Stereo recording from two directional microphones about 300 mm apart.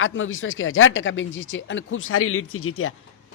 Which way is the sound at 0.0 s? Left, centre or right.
Left.